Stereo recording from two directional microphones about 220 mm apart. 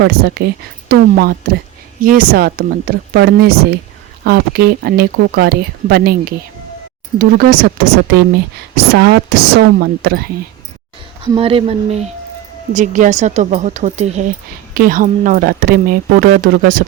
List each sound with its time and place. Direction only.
0.0 s a woman's voice: 45° right (ahead or behind)
11.2 s a woman's voice: 25° right (ahead or behind); by 16.8 s 40° right (ahead or behind)